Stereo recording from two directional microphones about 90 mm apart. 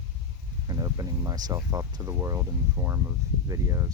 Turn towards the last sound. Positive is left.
turn(degrees=-35)  # may be behind; listen again after turning